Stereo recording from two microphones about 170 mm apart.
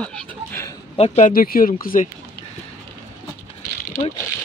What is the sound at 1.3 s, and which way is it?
Speech, 60° left (ahead or behind).